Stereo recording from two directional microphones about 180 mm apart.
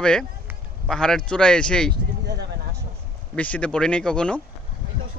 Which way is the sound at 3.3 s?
5° left (ahead or behind).